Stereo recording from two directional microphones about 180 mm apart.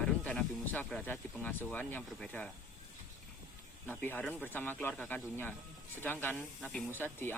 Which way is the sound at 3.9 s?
10° left (ahead or behind).